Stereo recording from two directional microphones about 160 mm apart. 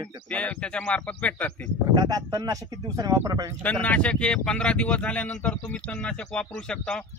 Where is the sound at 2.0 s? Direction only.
20° right (ahead or behind).